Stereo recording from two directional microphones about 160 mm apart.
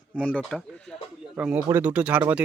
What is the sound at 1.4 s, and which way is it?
Speech, 10° right (ahead or behind).